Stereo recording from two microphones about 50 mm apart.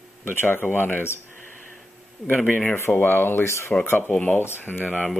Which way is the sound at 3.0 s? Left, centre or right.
Left.